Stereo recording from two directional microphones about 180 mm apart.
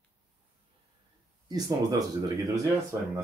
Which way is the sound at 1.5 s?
20° right (ahead or behind).